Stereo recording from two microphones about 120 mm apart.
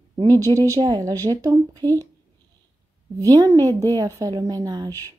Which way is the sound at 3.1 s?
30° right (ahead or behind).